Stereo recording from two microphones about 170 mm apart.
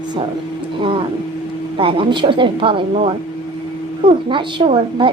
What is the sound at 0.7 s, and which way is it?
A woman's voice, 30° right (ahead or behind).